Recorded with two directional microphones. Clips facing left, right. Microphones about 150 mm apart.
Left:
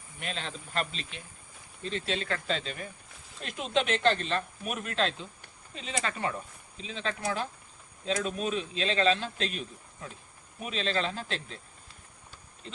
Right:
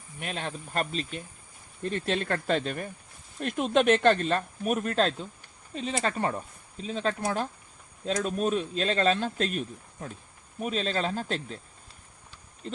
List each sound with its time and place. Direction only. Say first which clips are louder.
0.2 s speech: right 3 dB; 50° right (ahead or behind)